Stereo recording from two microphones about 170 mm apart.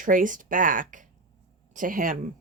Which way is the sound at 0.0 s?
50° right (ahead or behind).